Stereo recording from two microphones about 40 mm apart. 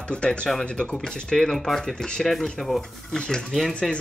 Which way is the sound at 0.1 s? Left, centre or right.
Left.